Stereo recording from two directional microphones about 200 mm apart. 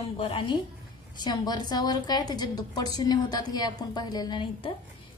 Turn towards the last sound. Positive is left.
turn(degrees=25)  # may be behind; listen again after turning